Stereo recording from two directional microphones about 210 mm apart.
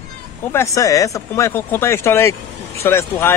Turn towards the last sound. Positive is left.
turn(degrees=10)  # may be behind; listen again after turning